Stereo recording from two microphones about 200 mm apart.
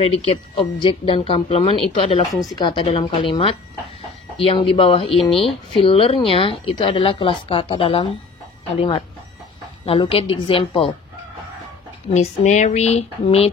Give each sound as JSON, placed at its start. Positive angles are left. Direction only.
{"t": 0.0, "sound": "speech", "side_deg": 30}
{"t": 12.1, "sound": "speech", "side_deg": 35}